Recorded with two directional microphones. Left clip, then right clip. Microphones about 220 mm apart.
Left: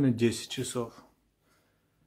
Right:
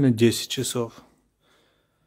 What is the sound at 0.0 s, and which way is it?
Speech, 50° right (ahead or behind).